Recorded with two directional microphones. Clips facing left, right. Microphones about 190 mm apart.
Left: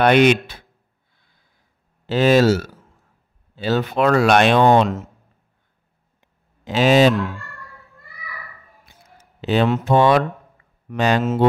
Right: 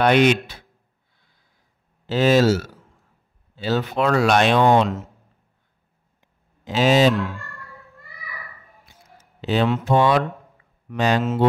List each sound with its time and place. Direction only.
0.0 s speech: 60° left (ahead or behind)
2.0 s speech: 60° left (ahead or behind)
6.6 s speech: 60° left (ahead or behind)
7.2 s speech: centre (ahead or behind)
9.4 s speech: 60° left (ahead or behind)